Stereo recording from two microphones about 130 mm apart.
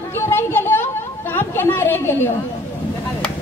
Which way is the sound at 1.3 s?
15° left (ahead or behind).